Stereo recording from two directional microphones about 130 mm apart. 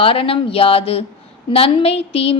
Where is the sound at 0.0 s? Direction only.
45° left (ahead or behind).